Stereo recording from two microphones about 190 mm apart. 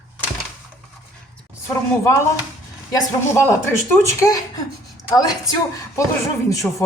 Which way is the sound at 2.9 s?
15° left (ahead or behind).